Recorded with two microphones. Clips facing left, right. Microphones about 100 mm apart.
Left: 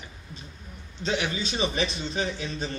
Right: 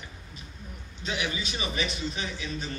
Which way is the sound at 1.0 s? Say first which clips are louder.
Left 4 dB; 35° left (ahead or behind).